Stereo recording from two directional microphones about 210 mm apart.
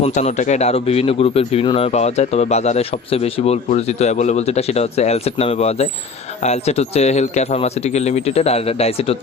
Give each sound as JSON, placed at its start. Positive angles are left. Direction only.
{"t": 0.0, "sound": "speech", "side_deg": 35}